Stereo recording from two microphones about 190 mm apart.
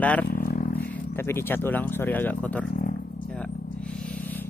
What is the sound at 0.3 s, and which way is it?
Roaring cats, 50° left (ahead or behind).